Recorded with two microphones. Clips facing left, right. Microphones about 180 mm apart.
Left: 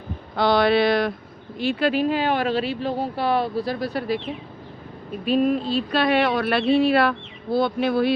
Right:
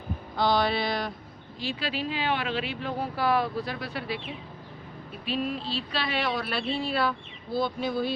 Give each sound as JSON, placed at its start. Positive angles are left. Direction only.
{"t": 0.3, "sound": "a sound", "side_deg": 70}
{"t": 1.5, "sound": "speech", "side_deg": 55}
{"t": 5.2, "sound": "speech", "side_deg": 50}